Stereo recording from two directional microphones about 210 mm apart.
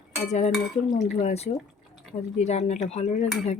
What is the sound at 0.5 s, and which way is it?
Dishes, centre (ahead or behind).